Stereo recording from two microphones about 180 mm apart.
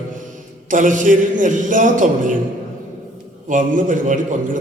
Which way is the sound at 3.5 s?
45° right (ahead or behind).